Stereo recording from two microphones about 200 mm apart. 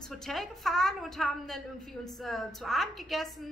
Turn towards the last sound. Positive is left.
turn(degrees=0)  # may be behind; listen again after turning